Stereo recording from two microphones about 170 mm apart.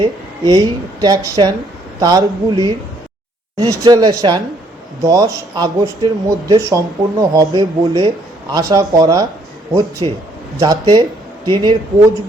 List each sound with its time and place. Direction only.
0.0 s speech: 25° right (ahead or behind)